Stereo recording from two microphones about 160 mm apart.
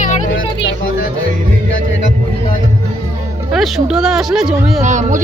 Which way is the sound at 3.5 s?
Centre (ahead or behind).